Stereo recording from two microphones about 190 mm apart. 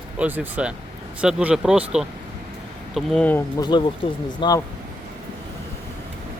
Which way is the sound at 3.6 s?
25° left (ahead or behind).